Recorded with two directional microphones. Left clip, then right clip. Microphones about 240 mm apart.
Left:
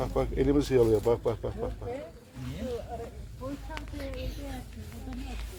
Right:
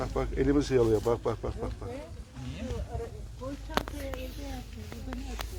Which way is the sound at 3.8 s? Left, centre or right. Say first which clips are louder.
Right 12 dB; right.